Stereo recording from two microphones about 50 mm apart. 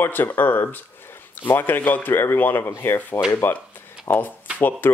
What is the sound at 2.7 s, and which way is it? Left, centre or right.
Speech, left.